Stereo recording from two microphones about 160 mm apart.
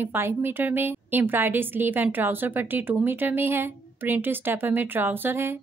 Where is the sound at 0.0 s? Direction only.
15° right (ahead or behind).